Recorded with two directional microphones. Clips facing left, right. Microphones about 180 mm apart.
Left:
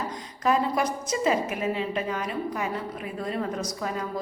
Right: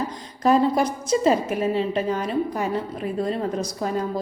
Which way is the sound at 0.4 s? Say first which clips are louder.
Right 5 dB; 35° right (ahead or behind).